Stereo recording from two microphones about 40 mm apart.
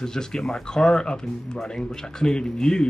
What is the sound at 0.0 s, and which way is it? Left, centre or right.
Speech, centre.